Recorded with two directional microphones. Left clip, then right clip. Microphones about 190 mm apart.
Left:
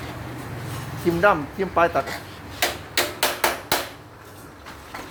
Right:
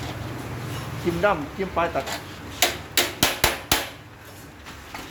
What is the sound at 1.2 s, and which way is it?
Speech, 35° left (ahead or behind).